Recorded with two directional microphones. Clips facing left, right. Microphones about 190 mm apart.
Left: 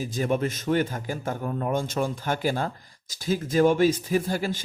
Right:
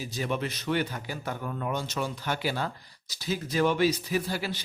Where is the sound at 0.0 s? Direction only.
50° left (ahead or behind).